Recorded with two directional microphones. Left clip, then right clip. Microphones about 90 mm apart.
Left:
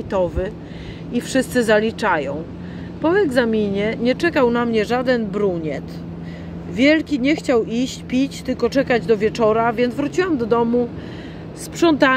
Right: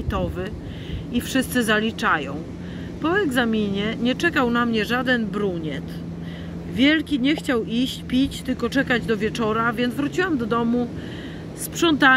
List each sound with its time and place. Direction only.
0.1 s speech: 25° right (ahead or behind)
11.8 s speech: 20° right (ahead or behind)